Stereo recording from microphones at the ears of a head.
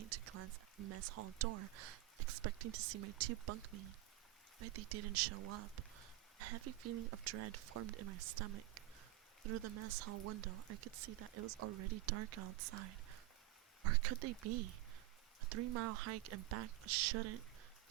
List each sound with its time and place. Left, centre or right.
0.0 s speech: right